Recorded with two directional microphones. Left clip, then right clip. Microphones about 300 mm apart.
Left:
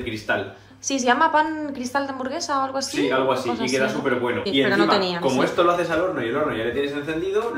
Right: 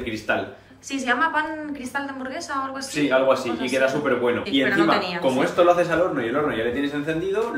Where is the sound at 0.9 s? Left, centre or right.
Centre.